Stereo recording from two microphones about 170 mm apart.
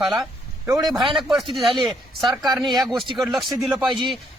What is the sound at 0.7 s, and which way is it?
Speech, 20° right (ahead or behind).